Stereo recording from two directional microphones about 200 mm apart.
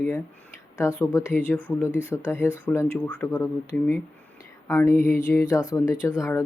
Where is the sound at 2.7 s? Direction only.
5° left (ahead or behind).